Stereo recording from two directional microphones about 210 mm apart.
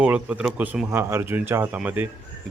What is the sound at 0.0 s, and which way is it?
Speech, 5° right (ahead or behind).